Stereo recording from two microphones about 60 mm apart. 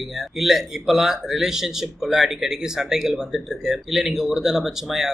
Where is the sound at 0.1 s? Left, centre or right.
Centre.